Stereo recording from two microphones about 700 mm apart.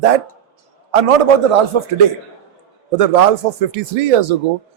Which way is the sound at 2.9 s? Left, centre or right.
Right.